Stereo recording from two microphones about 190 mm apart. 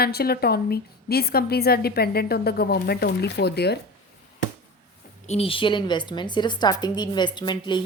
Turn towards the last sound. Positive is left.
turn(degrees=25)  # may be behind; listen again after turning